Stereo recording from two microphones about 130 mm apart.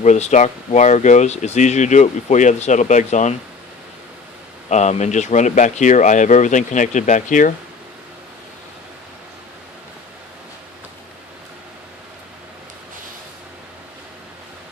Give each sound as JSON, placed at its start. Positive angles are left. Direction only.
{"t": 0.0, "sound": "speech", "side_deg": 65}
{"t": 4.7, "sound": "speech", "side_deg": 60}